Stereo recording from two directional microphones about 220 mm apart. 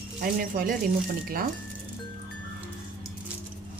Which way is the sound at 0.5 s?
40° right (ahead or behind).